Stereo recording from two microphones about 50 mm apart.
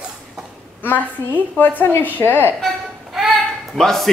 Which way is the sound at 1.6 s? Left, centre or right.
Left.